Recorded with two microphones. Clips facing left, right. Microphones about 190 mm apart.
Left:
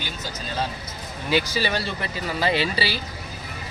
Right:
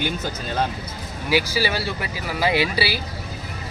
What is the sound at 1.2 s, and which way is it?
Speech, 10° right (ahead or behind).